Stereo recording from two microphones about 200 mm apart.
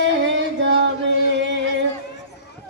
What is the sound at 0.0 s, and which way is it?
Music, 60° right (ahead or behind).